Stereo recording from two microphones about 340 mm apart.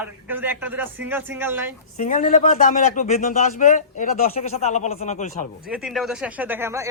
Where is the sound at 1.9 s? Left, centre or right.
Left.